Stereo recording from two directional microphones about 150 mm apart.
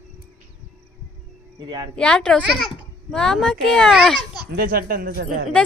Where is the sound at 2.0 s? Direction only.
5° left (ahead or behind).